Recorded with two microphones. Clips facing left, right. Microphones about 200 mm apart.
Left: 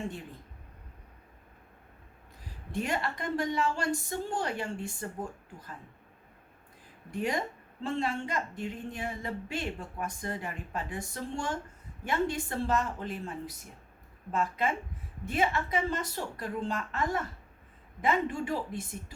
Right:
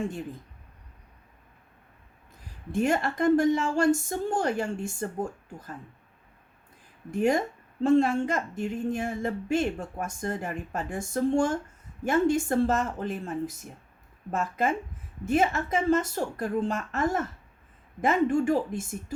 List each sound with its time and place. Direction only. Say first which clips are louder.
2.7 s speech: right 7 dB; 50° right (ahead or behind)
7.1 s speech: right 7 dB; 45° right (ahead or behind)